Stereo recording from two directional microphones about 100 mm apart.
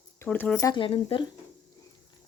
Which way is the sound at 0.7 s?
60° left (ahead or behind).